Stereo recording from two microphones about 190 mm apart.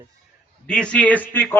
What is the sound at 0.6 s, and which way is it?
Speech, 5° left (ahead or behind).